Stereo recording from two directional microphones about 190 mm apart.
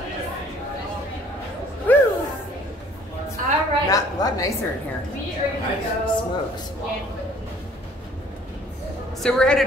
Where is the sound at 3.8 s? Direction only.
20° left (ahead or behind).